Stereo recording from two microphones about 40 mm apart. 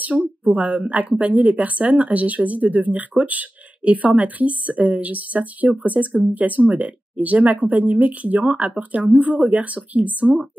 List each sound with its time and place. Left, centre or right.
0.4 s speech: right
10.2 s speech: centre